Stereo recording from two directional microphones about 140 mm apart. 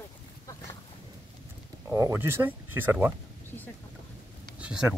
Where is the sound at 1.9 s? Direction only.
15° right (ahead or behind).